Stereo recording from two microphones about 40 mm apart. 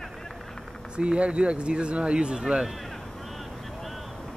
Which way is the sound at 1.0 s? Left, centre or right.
Right.